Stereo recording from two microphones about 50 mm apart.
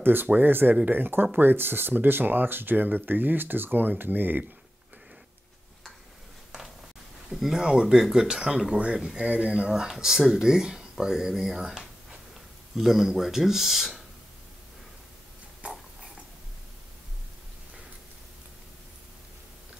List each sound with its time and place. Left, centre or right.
0.0 s speech: right
7.3 s speech: centre
7.6 s speech: centre
9.7 s speech: centre
15.6 s a sound: right